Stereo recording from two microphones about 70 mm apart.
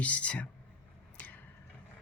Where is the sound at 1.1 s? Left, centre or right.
Left.